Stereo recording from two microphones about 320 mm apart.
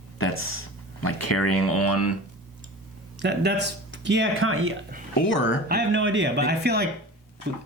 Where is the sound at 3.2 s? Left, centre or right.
Right.